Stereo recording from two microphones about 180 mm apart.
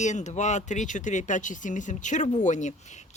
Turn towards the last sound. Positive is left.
turn(degrees=40)  # may be behind; listen again after turning